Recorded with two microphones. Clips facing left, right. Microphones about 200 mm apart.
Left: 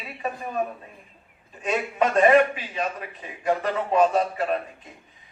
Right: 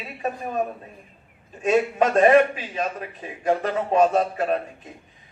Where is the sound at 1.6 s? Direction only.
45° right (ahead or behind).